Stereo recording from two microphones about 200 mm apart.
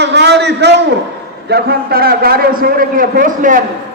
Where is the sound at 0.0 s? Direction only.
60° right (ahead or behind).